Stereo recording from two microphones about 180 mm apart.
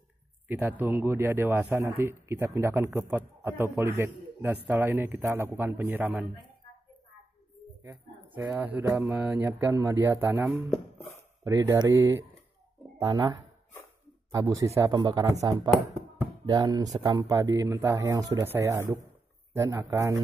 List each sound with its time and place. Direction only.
0.5 s a man's voice: 10° right (ahead or behind)
8.4 s a man's voice: 10° right (ahead or behind)